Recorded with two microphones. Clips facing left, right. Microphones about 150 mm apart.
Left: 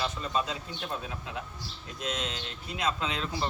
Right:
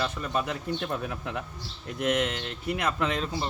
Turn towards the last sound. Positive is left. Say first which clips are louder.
# right 4 dB
turn(degrees=-60)  # may be behind; listen again after turning